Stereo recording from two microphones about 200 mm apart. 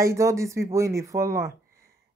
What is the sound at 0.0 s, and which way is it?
Speech, 15° right (ahead or behind).